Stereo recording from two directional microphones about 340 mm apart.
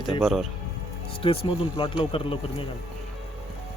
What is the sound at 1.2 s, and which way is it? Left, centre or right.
Speech, centre.